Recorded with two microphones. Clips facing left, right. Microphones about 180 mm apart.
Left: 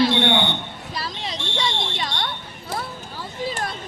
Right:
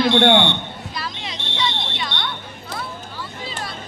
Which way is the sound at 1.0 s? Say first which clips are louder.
Left 3 dB; 35° left (ahead or behind).